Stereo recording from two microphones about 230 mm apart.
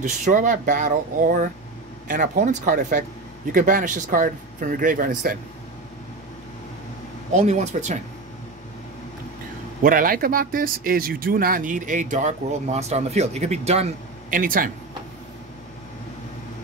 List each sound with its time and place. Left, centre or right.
0.0 s speech: right
7.3 s speech: right
9.8 s speech: right